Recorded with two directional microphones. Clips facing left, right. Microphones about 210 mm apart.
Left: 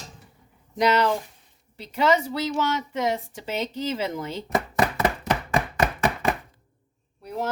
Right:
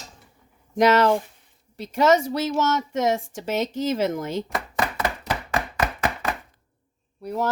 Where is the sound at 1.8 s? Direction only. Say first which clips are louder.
Right 3 dB; 45° right (ahead or behind).